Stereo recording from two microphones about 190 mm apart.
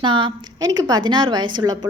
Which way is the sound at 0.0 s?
25° right (ahead or behind).